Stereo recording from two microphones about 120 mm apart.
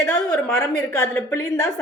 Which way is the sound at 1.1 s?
20° left (ahead or behind).